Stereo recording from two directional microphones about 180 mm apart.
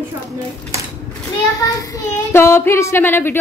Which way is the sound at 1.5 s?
20° left (ahead or behind).